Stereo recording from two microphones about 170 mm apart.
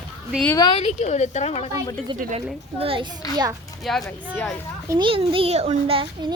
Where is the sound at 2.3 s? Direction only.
35° right (ahead or behind).